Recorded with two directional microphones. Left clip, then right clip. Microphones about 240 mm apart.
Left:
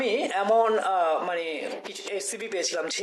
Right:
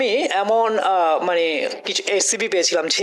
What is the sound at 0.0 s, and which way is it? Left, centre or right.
Speech, right.